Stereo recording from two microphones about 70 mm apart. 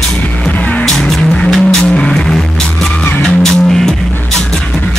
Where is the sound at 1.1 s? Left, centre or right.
Centre.